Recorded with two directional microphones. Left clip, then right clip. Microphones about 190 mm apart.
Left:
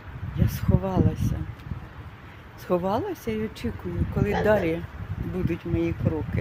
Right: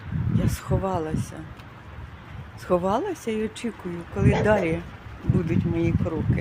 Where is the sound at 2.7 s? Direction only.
15° right (ahead or behind).